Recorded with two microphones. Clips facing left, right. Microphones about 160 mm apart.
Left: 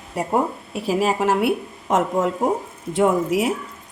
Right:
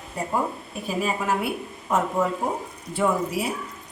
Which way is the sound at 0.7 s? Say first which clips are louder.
Left 6 dB; 80° left.